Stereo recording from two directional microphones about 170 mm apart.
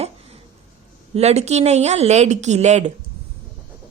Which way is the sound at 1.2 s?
40° right (ahead or behind).